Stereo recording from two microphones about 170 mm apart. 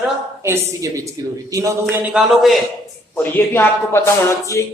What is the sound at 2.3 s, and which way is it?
Speech, centre (ahead or behind).